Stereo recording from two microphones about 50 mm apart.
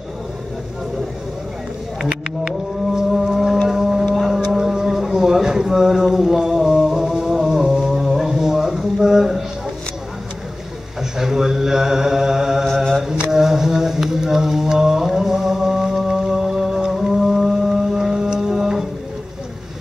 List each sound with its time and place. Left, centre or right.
2.0 s a sound: centre
3.6 s hum: centre
4.1 s a sound: centre
11.0 s mantra: centre
12.6 s mantra: centre
13.3 s mantra: centre